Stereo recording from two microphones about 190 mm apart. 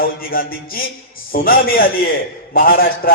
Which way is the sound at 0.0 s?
50° left (ahead or behind).